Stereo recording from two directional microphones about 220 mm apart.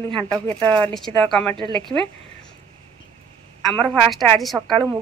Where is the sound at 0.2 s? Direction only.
5° left (ahead or behind).